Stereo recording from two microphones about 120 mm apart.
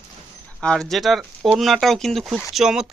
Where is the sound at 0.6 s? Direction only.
5° left (ahead or behind).